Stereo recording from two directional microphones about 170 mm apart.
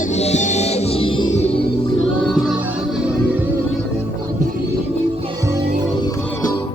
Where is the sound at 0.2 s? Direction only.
40° left (ahead or behind).